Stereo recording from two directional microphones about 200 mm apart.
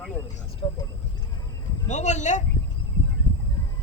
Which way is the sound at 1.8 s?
35° left (ahead or behind).